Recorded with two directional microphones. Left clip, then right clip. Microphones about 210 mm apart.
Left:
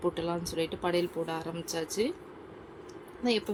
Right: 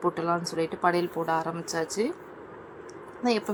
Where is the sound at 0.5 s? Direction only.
35° right (ahead or behind).